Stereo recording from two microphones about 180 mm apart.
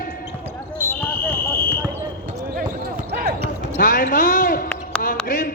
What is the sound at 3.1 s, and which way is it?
Basketball bounce, 60° right (ahead or behind).